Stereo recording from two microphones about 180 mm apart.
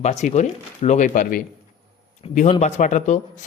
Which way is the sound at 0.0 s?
40° left (ahead or behind).